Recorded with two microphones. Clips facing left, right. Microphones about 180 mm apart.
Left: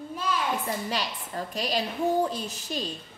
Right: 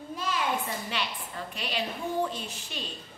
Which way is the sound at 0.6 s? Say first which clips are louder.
Left 3 dB; 40° left (ahead or behind).